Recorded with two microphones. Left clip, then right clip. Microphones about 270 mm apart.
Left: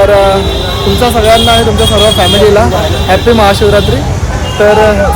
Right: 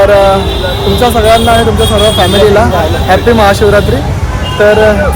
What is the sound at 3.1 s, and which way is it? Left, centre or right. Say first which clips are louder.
Speech: even; centre.